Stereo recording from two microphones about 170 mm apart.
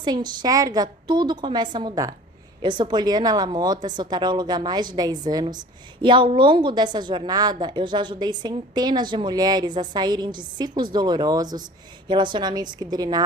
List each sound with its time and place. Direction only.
0.0 s a woman's voice: 25° right (ahead or behind)